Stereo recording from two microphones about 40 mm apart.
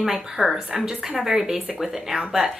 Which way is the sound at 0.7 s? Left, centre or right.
Centre.